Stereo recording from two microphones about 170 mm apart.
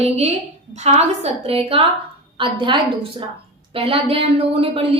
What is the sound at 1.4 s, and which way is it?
A woman's voice, 35° right (ahead or behind).